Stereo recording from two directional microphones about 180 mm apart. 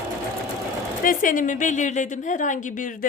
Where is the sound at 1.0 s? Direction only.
50° left (ahead or behind).